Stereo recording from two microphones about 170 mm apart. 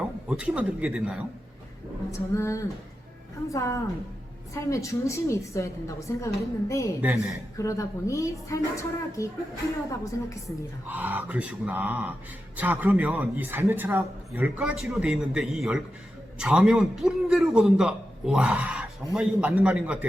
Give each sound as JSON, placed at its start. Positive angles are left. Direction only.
{"t": 0.3, "sound": "a man's voice", "side_deg": -5}
{"t": 2.0, "sound": "a woman's voice", "side_deg": 15}
{"t": 10.8, "sound": "speech", "side_deg": -10}
{"t": 14.6, "sound": "a man's voice", "side_deg": -5}